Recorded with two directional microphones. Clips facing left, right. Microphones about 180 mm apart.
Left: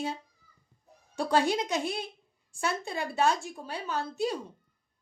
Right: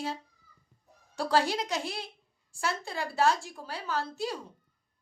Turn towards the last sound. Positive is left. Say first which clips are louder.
# left 2 dB
turn(degrees=20)  # may be behind; listen again after turning